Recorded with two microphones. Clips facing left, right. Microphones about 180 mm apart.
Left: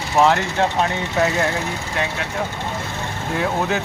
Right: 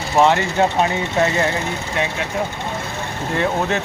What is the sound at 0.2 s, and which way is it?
Speech, 5° right (ahead or behind).